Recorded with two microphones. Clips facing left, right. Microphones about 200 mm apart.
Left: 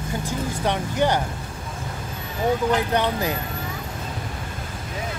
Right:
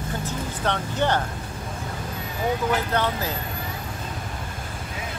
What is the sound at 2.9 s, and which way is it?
Speech, 15° left (ahead or behind).